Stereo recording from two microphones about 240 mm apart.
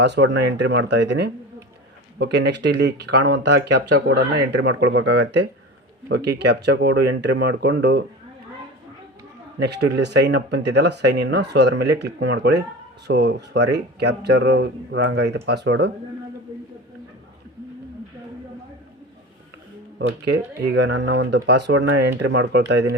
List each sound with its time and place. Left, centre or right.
0.0 s speech: right
9.6 s speech: right
20.0 s speech: right